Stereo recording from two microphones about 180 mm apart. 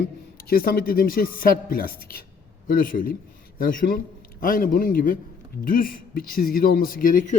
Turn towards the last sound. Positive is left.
turn(degrees=50)  # may be behind; listen again after turning